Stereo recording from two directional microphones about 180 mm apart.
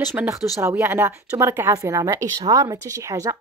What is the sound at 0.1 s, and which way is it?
A woman's voice, 15° right (ahead or behind).